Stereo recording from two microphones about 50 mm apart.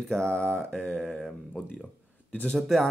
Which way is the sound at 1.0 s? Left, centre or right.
Centre.